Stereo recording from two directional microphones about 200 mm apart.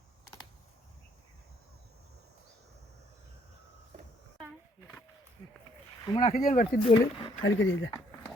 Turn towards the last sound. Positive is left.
turn(degrees=70)  # may be behind; listen again after turning